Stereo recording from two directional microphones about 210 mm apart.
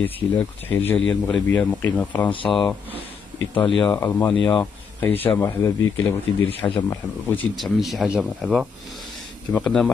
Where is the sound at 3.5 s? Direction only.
25° left (ahead or behind).